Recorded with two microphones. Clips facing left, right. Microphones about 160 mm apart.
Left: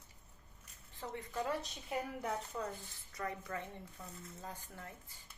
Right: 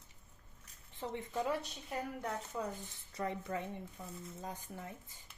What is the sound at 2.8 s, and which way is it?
Speech, 25° right (ahead or behind).